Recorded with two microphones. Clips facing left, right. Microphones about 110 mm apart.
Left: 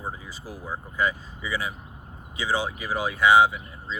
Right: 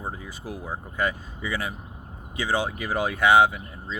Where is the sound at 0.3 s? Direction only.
60° right (ahead or behind).